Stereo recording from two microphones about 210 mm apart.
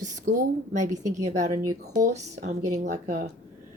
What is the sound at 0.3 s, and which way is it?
Speech, 35° right (ahead or behind).